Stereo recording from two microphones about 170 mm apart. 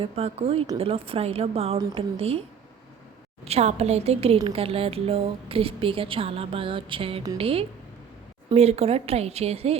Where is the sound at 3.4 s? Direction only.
40° right (ahead or behind).